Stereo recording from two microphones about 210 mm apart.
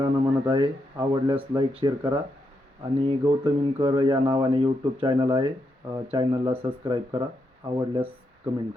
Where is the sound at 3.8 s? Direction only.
20° right (ahead or behind).